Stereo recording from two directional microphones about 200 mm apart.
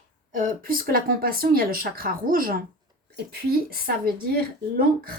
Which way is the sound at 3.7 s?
50° right (ahead or behind).